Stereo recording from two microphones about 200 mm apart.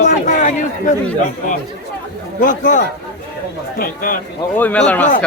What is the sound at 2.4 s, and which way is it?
Speech, 40° left (ahead or behind).